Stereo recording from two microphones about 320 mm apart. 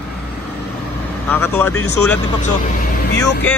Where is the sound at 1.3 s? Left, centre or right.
Centre.